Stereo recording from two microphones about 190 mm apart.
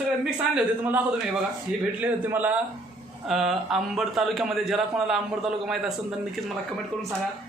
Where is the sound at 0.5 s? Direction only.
10° right (ahead or behind).